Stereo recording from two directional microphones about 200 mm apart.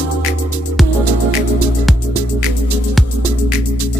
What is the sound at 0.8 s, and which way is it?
Music, centre (ahead or behind).